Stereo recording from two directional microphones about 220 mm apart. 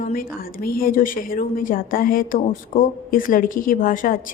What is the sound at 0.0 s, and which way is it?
A woman's voice, 40° left (ahead or behind).